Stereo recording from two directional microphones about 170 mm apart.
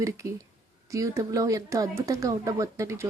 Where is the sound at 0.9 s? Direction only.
20° right (ahead or behind).